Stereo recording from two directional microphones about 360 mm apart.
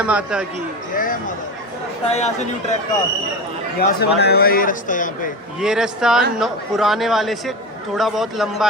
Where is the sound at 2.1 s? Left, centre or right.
Centre.